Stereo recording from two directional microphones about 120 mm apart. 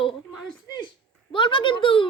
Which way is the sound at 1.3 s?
45° left (ahead or behind).